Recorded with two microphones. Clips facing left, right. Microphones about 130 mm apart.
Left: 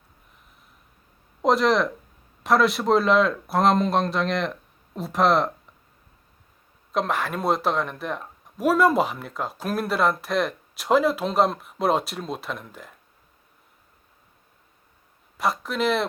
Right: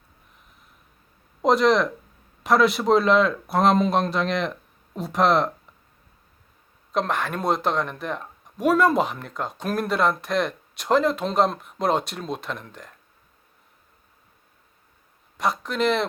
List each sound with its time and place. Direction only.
1.4 s speech: centre (ahead or behind)
6.9 s speech: centre (ahead or behind)
15.4 s speech: centre (ahead or behind)